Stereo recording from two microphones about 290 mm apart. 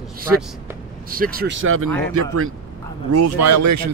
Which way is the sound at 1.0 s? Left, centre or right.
Right.